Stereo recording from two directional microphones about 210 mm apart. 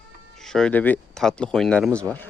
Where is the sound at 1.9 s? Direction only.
15° right (ahead or behind).